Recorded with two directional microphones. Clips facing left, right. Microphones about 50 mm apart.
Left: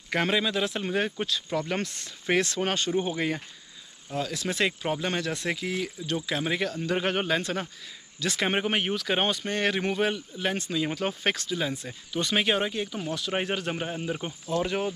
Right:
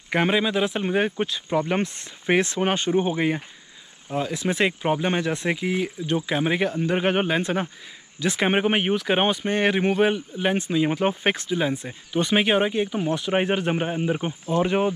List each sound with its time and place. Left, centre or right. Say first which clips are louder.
0.1 s speech: right 4 dB; centre